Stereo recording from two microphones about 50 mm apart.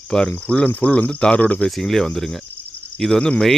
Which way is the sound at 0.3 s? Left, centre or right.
Left.